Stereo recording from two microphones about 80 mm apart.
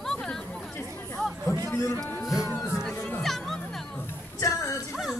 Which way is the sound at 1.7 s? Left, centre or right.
Left.